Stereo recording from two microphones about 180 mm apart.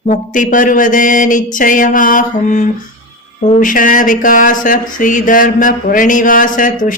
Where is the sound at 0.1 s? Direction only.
45° left (ahead or behind).